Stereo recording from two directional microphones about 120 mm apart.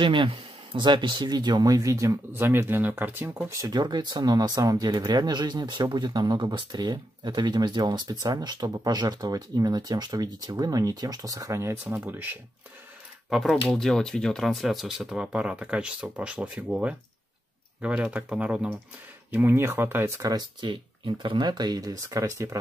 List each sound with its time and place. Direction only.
0.0 s speech: 45° right (ahead or behind); by 3.5 s 15° right (ahead or behind)
3.6 s speech: 35° right (ahead or behind); by 12.4 s 15° right (ahead or behind)
13.3 s speech: centre (ahead or behind); by 22.6 s 30° right (ahead or behind)